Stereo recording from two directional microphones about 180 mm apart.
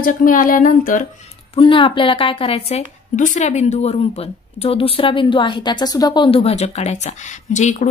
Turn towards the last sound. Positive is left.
turn(degrees=40)  # may be behind; listen again after turning